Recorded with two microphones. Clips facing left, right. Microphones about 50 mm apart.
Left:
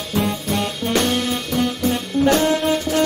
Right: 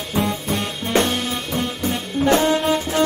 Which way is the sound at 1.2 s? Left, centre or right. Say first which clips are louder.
Left 2 dB; centre.